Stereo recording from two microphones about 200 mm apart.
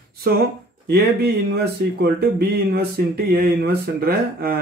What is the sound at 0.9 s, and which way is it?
Speech, 50° right (ahead or behind).